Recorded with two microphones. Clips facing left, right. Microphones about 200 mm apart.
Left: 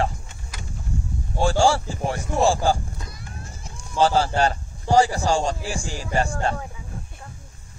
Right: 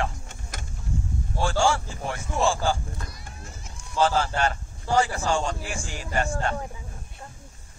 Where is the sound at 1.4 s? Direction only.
35° left (ahead or behind).